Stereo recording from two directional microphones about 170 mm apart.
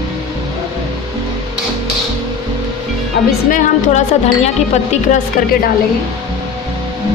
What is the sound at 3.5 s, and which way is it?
Speech, 40° left (ahead or behind).